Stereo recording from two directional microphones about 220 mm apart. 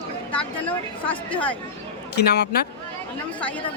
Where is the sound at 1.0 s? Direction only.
5° left (ahead or behind).